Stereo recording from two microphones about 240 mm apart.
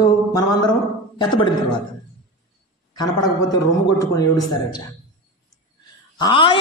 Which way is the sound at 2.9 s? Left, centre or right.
Centre.